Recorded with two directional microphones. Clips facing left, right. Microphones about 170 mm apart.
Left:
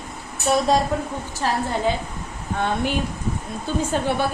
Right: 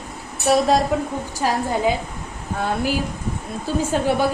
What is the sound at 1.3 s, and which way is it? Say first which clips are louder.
A woman's voice: right 2 dB; 10° right (ahead or behind).